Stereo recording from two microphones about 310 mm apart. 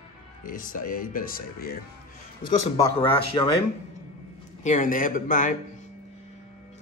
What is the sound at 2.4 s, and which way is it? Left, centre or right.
A man's voice, centre.